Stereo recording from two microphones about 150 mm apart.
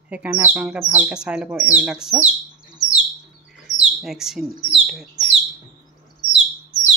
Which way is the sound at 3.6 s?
5° right (ahead or behind).